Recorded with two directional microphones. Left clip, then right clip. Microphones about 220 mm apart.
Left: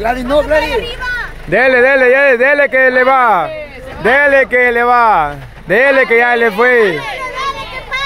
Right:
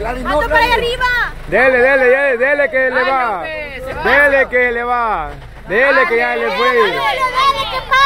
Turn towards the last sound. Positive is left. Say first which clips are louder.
# right 6 dB
turn(degrees=-10)  # may be behind; listen again after turning